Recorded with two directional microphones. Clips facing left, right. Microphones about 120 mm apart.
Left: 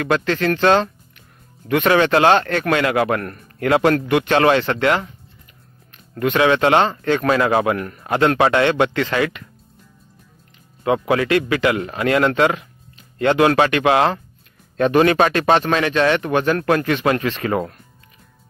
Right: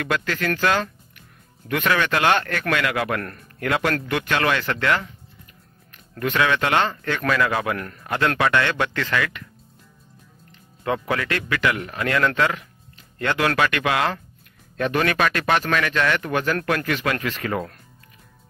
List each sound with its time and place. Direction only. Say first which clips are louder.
0.0 s speech: left 6 dB; 30° left (ahead or behind)
6.1 s speech: left 5 dB; 20° left (ahead or behind)
10.8 s speech: left 6 dB; 20° left (ahead or behind)